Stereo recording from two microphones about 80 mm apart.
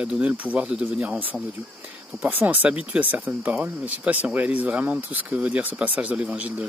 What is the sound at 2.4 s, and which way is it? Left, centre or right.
Speech, centre.